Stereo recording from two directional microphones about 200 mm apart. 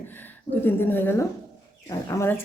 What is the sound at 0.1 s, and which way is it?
Speech, 10° left (ahead or behind).